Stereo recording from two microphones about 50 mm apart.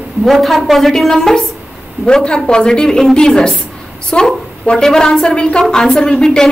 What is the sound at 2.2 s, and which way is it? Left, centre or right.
Speech, centre.